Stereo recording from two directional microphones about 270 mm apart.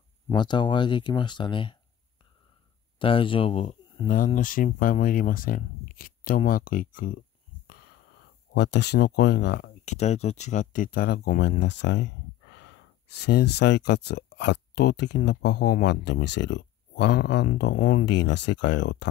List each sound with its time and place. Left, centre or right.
0.3 s speech: centre
3.0 s speech: centre; by 19.0 s left